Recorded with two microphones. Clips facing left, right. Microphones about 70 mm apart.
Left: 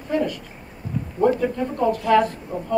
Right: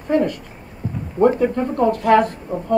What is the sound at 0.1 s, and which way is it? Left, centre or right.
Speech, right.